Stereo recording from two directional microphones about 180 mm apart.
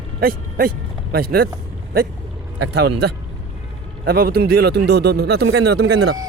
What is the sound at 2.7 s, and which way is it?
Speech, 65° right (ahead or behind).